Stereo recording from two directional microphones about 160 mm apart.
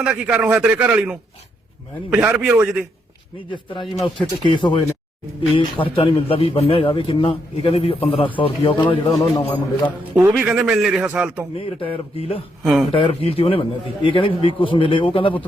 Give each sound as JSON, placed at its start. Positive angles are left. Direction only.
{"t": 0.0, "sound": "a man's voice", "side_deg": -10}
{"t": 3.5, "sound": "a man's voice", "side_deg": 30}
{"t": 10.2, "sound": "a man's voice", "side_deg": -10}
{"t": 11.5, "sound": "a man's voice", "side_deg": 35}
{"t": 12.6, "sound": "a man's voice", "side_deg": 0}
{"t": 12.9, "sound": "a man's voice", "side_deg": 35}